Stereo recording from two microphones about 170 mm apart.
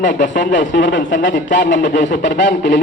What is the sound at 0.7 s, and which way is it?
Speech, 90° left.